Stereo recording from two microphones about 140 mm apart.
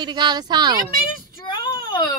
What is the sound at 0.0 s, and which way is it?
Speech, 30° right (ahead or behind).